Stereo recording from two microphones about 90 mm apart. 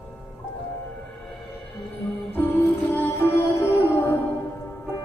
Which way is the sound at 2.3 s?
20° left (ahead or behind).